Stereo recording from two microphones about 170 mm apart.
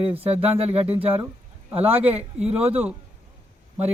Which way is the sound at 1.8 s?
35° right (ahead or behind).